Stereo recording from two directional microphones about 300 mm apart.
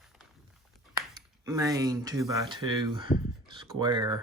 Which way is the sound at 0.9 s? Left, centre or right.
Centre.